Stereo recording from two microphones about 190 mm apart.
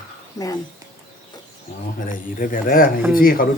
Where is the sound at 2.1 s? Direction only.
45° left (ahead or behind).